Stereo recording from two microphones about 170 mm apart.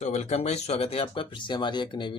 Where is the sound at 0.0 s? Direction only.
40° left (ahead or behind).